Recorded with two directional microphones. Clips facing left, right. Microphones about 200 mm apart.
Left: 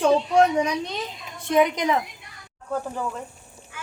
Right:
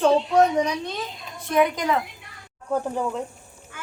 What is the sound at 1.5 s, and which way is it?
Speech, 20° left (ahead or behind).